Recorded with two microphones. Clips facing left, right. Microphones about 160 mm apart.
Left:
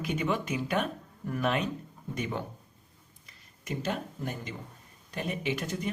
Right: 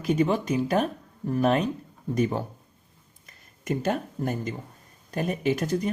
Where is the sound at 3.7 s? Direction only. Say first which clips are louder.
Right 7 dB; 45° right (ahead or behind).